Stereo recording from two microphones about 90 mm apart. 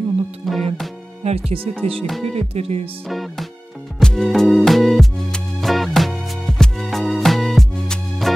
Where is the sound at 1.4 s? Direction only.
90° right.